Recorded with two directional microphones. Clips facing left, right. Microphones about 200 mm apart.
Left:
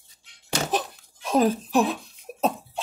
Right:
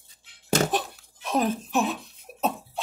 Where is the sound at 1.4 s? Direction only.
35° left (ahead or behind).